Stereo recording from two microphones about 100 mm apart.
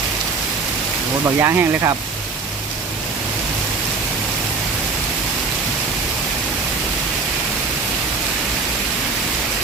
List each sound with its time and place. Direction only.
1.4 s speech: 30° right (ahead or behind)